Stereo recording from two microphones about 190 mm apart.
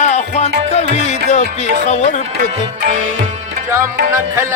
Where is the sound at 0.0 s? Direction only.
35° left (ahead or behind).